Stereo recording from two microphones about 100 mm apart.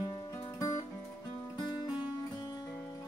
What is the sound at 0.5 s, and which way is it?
Music, 35° left (ahead or behind).